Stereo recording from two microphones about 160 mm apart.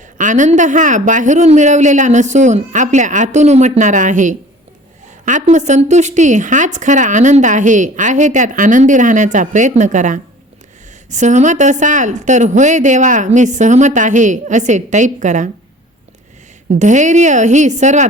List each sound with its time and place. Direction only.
0.2 s a woman's voice: 50° right (ahead or behind)
16.7 s a woman's voice: 50° right (ahead or behind)